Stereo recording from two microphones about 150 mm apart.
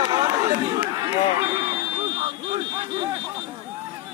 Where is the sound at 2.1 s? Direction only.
35° right (ahead or behind).